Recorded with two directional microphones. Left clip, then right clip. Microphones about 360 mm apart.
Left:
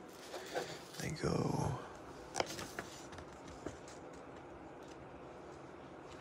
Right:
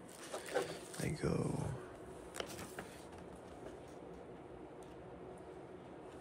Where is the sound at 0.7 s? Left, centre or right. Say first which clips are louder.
Right 1 dB; centre.